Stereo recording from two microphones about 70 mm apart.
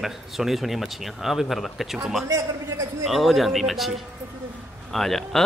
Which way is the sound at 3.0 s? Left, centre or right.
Centre.